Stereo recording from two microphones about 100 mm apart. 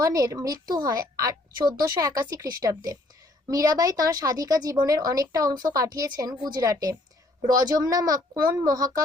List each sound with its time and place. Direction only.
0.0 s a woman's voice: 35° right (ahead or behind)